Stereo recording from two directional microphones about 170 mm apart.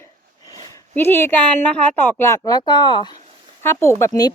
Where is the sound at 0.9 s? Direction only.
15° left (ahead or behind).